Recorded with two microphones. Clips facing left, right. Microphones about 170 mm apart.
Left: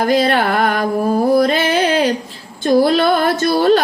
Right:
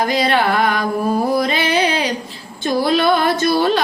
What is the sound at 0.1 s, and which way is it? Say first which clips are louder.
Music: left 2 dB; 45° left (ahead or behind).